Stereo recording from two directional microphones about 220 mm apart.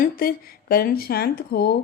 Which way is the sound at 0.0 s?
40° left (ahead or behind).